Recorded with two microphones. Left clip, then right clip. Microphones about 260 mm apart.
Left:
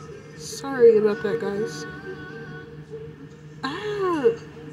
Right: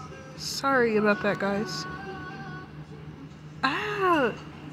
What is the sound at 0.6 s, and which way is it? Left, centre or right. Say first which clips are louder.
A woman's voice: left 6 dB; centre.